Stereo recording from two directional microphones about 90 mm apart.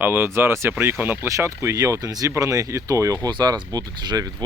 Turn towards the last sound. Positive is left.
turn(degrees=-50)  # may be behind; listen again after turning